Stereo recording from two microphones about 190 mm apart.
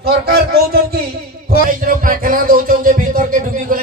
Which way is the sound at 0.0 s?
55° right (ahead or behind).